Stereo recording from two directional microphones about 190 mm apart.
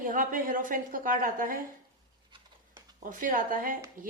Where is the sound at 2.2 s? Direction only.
25° right (ahead or behind).